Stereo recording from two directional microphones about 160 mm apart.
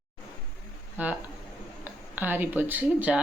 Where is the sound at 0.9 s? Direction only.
10° right (ahead or behind).